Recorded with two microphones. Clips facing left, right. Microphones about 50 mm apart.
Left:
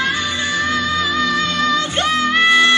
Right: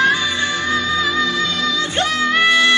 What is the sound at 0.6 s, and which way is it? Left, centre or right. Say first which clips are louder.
Music: right 1 dB; left.